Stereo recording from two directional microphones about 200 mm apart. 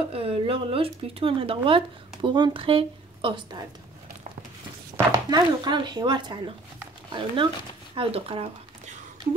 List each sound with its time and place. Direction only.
0.1 s speech: 30° right (ahead or behind)
4.9 s speech: 20° right (ahead or behind)